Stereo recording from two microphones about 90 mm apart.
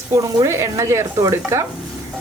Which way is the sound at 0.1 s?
40° right (ahead or behind).